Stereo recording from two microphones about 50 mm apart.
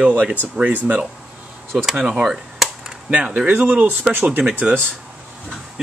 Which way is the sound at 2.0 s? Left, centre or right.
Centre.